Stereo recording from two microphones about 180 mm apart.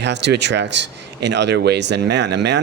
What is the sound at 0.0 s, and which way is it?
Speech, 70° right (ahead or behind).